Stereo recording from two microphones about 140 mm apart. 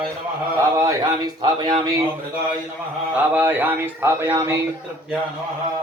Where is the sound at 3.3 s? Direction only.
15° right (ahead or behind).